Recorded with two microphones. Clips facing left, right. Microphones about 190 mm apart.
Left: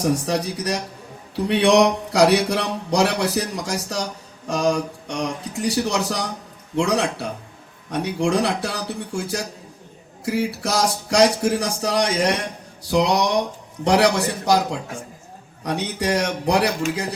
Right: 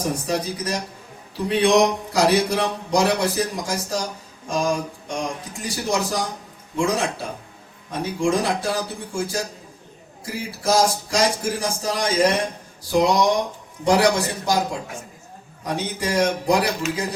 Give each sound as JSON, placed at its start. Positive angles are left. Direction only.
{"t": 0.3, "sound": "speech", "side_deg": 70}